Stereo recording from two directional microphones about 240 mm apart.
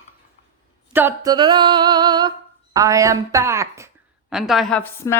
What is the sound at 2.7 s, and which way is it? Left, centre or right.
A woman's voice, centre.